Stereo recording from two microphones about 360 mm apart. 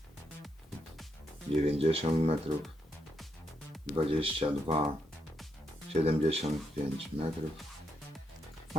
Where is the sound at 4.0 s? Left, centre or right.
Centre.